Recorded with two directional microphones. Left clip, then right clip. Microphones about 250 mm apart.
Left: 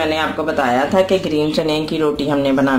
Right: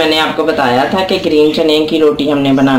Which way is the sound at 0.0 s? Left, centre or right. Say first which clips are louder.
Right 7 dB; left.